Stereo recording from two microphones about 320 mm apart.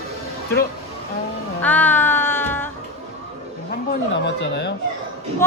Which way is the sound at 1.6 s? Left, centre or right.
Centre.